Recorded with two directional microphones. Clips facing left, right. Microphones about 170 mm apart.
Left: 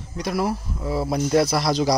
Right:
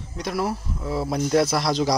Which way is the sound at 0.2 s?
Centre (ahead or behind).